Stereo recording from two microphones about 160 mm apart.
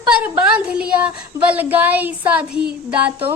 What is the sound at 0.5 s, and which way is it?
A woman's voice, 5° right (ahead or behind).